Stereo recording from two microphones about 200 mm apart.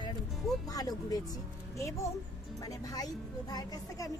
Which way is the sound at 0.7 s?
20° left (ahead or behind).